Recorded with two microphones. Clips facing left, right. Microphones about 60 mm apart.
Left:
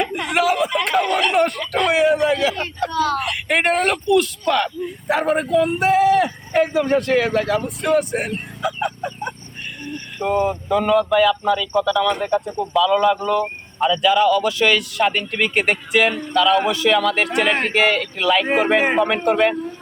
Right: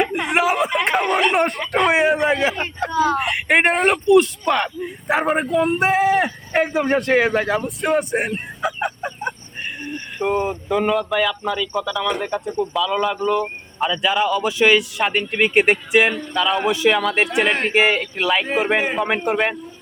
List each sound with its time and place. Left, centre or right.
0.1 s a sound: right
2.1 s speech: right
8.6 s a sound: centre
10.2 s a man's voice: centre
10.8 s a man's voice: centre; by 17.3 s right
17.5 s speech: centre
17.7 s a man's voice: centre